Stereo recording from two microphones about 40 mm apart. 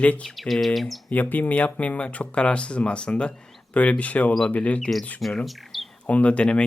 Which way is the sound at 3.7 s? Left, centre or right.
Left.